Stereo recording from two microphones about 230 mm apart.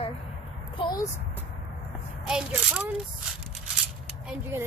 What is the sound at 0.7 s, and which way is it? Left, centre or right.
Speech, centre.